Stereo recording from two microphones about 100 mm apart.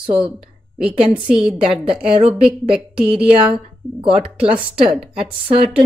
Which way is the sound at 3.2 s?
60° right (ahead or behind).